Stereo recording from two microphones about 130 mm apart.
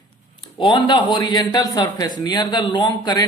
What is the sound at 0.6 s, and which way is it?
A man's voice, 40° left (ahead or behind).